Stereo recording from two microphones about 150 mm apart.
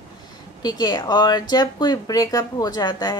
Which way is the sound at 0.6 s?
25° left (ahead or behind).